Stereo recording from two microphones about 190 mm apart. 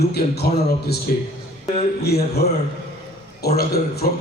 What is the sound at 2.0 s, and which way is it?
Speech, 55° left (ahead or behind).